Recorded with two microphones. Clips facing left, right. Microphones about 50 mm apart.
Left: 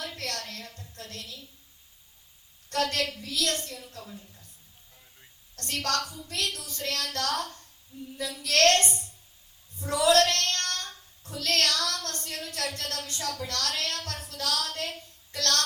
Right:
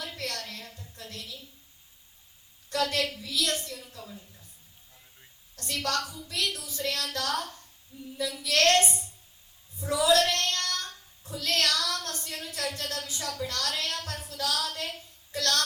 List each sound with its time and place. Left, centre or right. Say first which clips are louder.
0.2 s a sound: even; left
3.1 s speech: even; left
5.5 s speech: left 1 dB; left
6.4 s a woman's voice: right 2 dB; left